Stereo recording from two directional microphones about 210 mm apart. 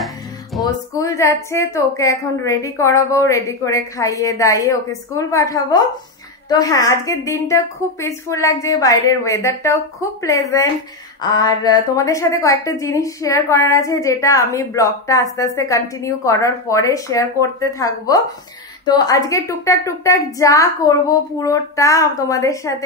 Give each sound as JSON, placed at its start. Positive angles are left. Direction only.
{"t": 0.0, "sound": "music", "side_deg": 0}
{"t": 0.7, "sound": "a woman's voice", "side_deg": 15}